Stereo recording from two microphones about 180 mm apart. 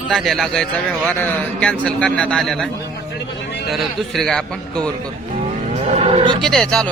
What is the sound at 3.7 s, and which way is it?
A man's voice, centre (ahead or behind).